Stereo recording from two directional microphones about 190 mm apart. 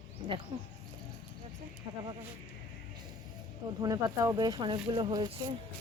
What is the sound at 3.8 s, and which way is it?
Speech, 20° right (ahead or behind).